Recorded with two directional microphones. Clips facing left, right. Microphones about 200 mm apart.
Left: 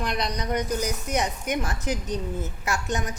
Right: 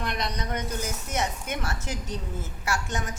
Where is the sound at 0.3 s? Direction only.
15° left (ahead or behind).